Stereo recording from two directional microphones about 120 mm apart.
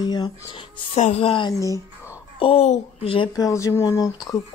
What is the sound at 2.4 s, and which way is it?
Speech, 55° left (ahead or behind).